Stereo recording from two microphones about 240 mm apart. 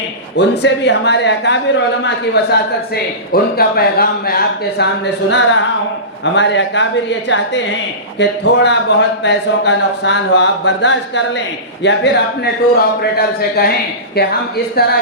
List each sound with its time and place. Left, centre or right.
0.3 s speech: left
5.3 s speech: left